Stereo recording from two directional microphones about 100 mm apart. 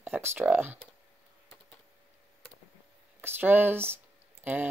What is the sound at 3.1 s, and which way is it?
Speech, 20° right (ahead or behind).